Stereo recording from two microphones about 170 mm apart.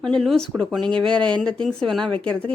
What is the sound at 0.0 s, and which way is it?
A woman's voice, 5° left (ahead or behind).